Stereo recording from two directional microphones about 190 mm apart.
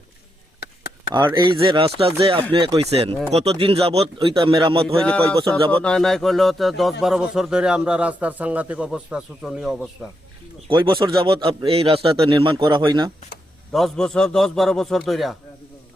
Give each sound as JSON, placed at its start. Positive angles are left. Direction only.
{"t": 1.1, "sound": "speech", "side_deg": -20}
{"t": 5.8, "sound": "a man's voice", "side_deg": 5}
{"t": 10.7, "sound": "speech", "side_deg": -25}
{"t": 13.7, "sound": "a man's voice", "side_deg": 0}